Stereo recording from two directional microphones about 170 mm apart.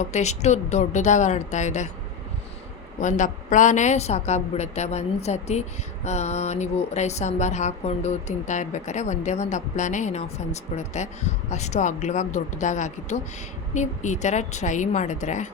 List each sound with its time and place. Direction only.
0.0 s speech: 40° left (ahead or behind)
3.0 s a woman's voice: 45° left (ahead or behind)